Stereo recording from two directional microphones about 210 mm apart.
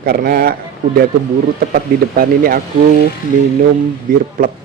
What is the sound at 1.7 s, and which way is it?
Speech, 45° right (ahead or behind).